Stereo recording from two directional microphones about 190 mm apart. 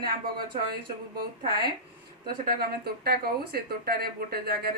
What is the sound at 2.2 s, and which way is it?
Speech, 50° right (ahead or behind).